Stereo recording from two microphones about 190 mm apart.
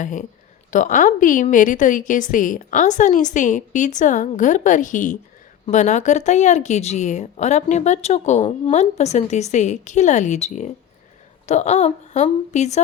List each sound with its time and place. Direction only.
0.0 s a woman's voice: 40° left (ahead or behind)